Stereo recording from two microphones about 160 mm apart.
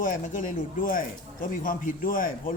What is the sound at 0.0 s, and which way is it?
Speech, 55° left (ahead or behind).